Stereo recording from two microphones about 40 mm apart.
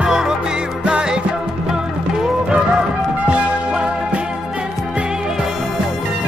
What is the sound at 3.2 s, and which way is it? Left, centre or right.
Music, right.